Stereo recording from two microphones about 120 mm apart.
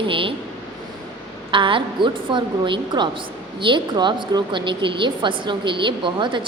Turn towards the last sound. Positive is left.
turn(degrees=-40)  # may be behind; listen again after turning